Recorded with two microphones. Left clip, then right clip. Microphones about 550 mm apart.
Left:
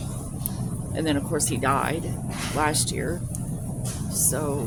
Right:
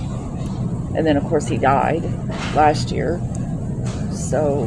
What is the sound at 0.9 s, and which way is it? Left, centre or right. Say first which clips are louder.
Speech: right 8 dB; left.